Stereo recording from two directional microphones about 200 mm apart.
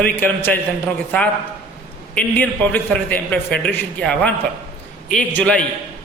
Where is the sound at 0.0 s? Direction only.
10° left (ahead or behind).